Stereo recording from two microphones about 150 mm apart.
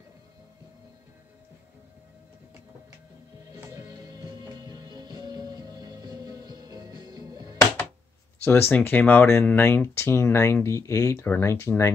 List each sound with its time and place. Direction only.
4.6 s music: 30° right (ahead or behind)
8.5 s speech: 15° left (ahead or behind)